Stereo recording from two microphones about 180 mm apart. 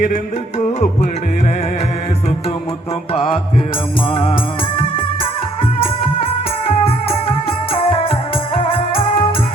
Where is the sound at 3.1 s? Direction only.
30° left (ahead or behind).